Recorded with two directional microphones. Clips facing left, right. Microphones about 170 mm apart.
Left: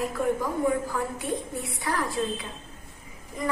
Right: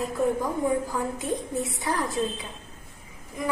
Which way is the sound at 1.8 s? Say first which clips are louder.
Left 2 dB; 20° right (ahead or behind).